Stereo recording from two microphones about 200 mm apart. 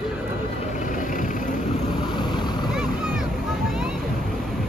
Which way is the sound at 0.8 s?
40° left (ahead or behind).